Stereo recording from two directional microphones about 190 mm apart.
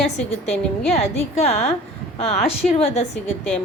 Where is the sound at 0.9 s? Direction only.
35° left (ahead or behind).